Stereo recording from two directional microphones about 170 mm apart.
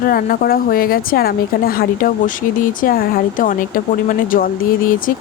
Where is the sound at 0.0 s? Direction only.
60° left (ahead or behind).